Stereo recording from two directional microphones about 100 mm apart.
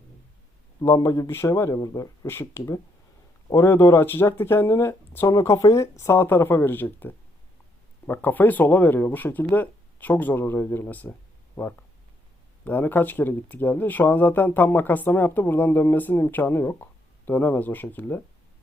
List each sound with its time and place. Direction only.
0.9 s speech: 35° left (ahead or behind); by 18.2 s 20° left (ahead or behind)